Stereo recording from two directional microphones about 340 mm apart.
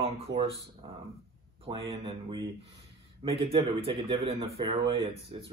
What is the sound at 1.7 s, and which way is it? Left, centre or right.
A man's voice, centre.